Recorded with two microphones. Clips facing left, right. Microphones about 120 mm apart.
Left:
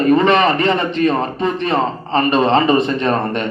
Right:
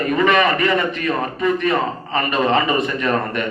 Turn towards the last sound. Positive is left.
turn(degrees=30)  # may be behind; listen again after turning